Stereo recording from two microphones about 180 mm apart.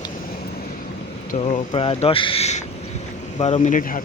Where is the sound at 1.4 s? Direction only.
35° left (ahead or behind).